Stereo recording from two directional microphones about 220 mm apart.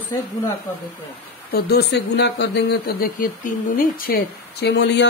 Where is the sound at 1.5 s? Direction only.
45° left (ahead or behind).